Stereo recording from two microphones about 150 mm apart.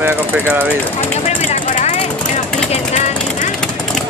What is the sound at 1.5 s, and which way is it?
Vehicle, 55° left (ahead or behind).